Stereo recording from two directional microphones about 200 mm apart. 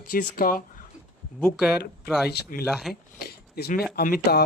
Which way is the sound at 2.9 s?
50° left (ahead or behind).